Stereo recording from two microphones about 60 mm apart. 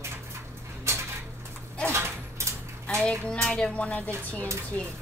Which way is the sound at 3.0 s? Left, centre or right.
Centre.